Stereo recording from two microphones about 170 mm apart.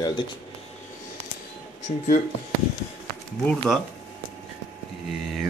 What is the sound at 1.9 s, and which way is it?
Speech, 45° left (ahead or behind).